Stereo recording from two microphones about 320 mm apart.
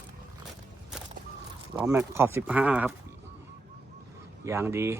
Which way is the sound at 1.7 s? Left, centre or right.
Centre.